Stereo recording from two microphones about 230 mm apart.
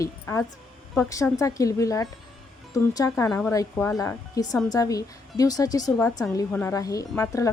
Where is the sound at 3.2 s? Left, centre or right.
Centre.